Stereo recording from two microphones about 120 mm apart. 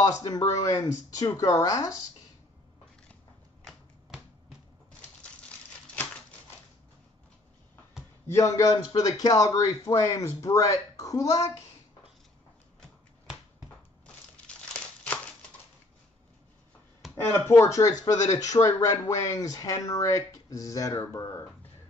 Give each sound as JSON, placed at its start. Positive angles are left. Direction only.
{"t": 0.0, "sound": "speech", "side_deg": 30}
{"t": 3.6, "sound": "finger snapping", "side_deg": -5}
{"t": 8.3, "sound": "speech", "side_deg": 25}
{"t": 14.3, "sound": "crumpling", "side_deg": 10}
{"t": 17.2, "sound": "speech", "side_deg": 20}